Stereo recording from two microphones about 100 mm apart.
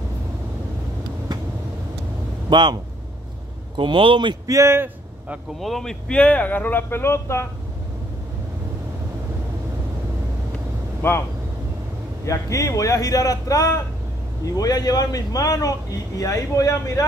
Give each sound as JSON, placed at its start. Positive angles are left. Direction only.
{"t": 2.5, "sound": "speech", "side_deg": -50}
{"t": 4.5, "sound": "speech", "side_deg": -30}
{"t": 5.6, "sound": "speech", "side_deg": 5}
{"t": 11.0, "sound": "speech", "side_deg": 25}
{"t": 12.3, "sound": "a man's voice", "side_deg": 35}